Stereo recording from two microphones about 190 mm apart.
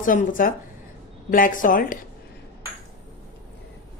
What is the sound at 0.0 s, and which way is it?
Speech, 45° left (ahead or behind).